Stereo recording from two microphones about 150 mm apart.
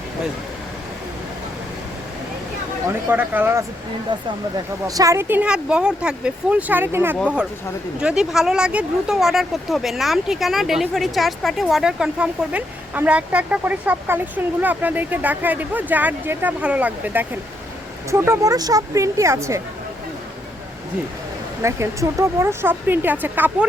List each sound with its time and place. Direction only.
3.1 s speech: 10° right (ahead or behind)
4.9 s speech: 20° right (ahead or behind)
21.6 s speech: 20° right (ahead or behind)